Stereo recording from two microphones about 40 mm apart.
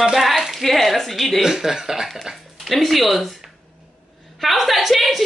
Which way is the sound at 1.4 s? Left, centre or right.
Centre.